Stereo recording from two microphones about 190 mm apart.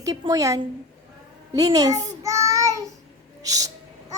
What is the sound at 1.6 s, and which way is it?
Child singing, 20° right (ahead or behind).